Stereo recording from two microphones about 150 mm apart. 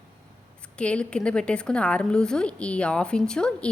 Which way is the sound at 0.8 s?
5° left (ahead or behind).